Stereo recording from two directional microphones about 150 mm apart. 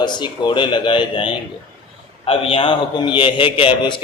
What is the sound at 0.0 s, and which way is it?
A man's voice, 30° left (ahead or behind).